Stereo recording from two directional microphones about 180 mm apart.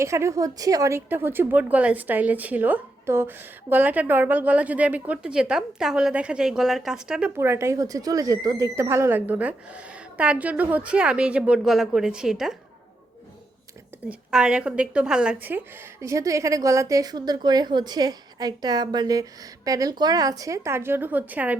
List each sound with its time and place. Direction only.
0.0 s speech: 15° right (ahead or behind)
14.1 s speech: 5° right (ahead or behind)